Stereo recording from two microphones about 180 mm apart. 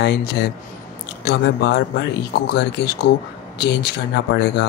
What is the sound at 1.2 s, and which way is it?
Speech, 70° left (ahead or behind).